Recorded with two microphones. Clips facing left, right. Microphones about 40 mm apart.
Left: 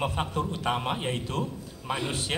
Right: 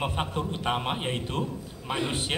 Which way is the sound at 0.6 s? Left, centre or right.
Right.